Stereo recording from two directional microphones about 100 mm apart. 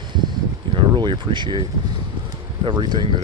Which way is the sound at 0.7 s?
55° right (ahead or behind).